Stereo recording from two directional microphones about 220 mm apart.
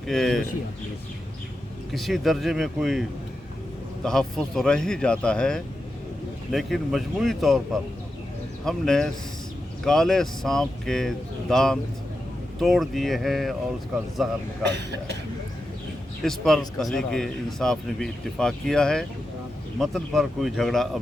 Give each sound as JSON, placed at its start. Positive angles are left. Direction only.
{"t": 0.1, "sound": "speech", "side_deg": 0}
{"t": 1.9, "sound": "speech", "side_deg": 0}
{"t": 14.6, "sound": "speech", "side_deg": -50}
{"t": 16.2, "sound": "speech", "side_deg": 0}